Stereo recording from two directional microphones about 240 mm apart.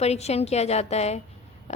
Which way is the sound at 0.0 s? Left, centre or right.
Left.